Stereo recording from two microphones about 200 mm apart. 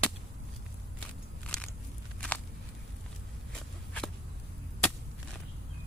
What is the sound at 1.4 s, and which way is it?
Biting, 5° left (ahead or behind).